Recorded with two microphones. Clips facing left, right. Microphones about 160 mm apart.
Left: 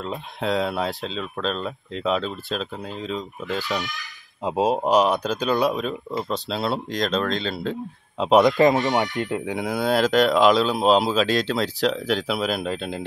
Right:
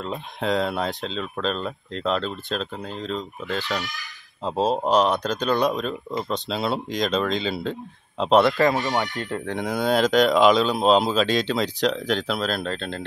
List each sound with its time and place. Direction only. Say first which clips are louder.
0.0 s speech: even; centre (ahead or behind)
4.5 s speech: left 1 dB; 10° left (ahead or behind)
8.2 s speech: left 2 dB; 10° left (ahead or behind)
9.5 s speech: right 2 dB; 5° left (ahead or behind)